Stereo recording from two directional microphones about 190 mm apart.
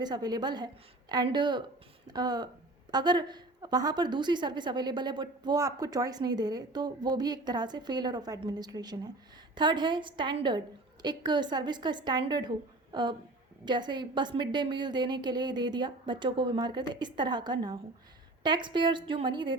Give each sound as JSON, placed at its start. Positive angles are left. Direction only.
{"t": 0.0, "sound": "a woman's voice", "side_deg": -20}